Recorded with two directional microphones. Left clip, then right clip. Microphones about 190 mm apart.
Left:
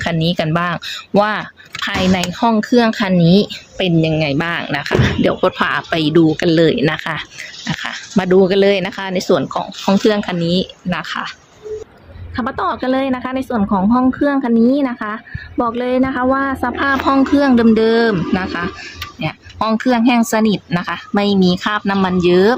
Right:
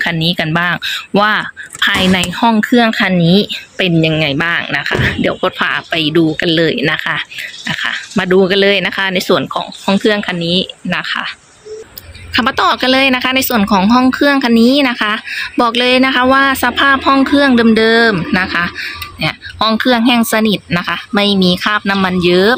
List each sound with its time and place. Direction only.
0.0 s speech: 5° left (ahead or behind)
12.4 s speech: 10° right (ahead or behind)